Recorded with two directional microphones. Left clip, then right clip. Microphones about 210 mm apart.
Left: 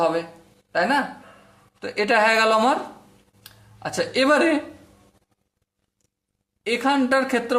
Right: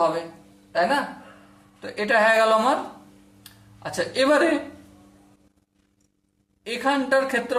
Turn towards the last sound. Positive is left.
turn(degrees=45)  # may be behind; listen again after turning